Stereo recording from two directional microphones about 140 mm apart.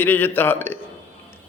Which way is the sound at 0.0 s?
15° left (ahead or behind).